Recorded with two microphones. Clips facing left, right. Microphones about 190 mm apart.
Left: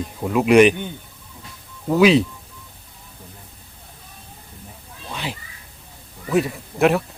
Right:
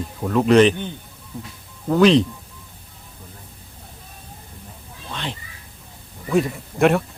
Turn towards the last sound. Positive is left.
turn(degrees=0)  # may be behind; listen again after turning